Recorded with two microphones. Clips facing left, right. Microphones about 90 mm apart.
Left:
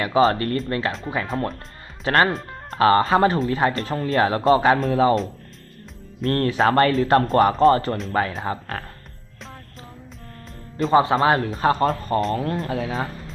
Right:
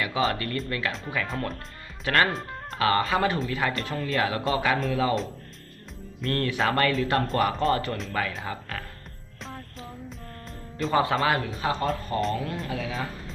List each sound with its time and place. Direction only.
0.0 s speech: 40° left (ahead or behind)
6.2 s speech: 35° left (ahead or behind)
10.9 s speech: 30° left (ahead or behind)